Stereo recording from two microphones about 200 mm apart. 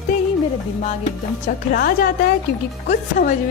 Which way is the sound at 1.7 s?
50° left (ahead or behind).